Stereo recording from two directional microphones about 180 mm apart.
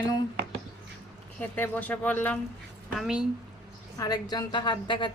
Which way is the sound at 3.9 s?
20° left (ahead or behind).